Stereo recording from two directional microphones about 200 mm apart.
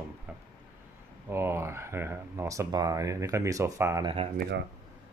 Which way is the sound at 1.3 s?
10° right (ahead or behind).